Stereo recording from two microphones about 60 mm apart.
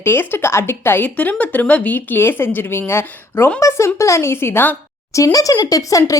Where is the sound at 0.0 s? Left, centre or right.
Left.